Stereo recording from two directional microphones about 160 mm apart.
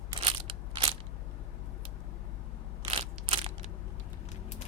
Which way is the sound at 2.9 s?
40° right (ahead or behind).